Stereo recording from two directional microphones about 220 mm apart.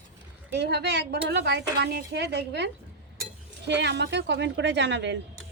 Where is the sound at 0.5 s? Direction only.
50° right (ahead or behind).